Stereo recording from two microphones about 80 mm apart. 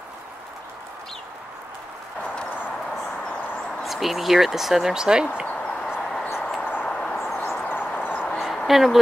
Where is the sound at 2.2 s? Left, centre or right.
Left.